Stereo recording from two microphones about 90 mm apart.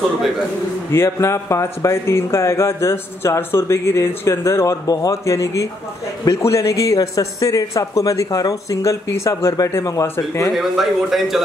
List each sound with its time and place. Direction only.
0.9 s a man's voice: 30° left (ahead or behind)
10.5 s speech: centre (ahead or behind)